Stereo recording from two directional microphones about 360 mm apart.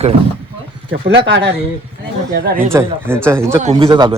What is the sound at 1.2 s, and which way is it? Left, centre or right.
Speech, right.